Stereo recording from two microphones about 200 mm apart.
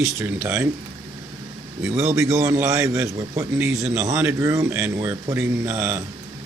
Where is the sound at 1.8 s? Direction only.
10° right (ahead or behind).